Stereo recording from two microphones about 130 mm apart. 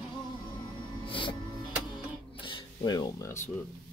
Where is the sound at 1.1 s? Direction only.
40° left (ahead or behind).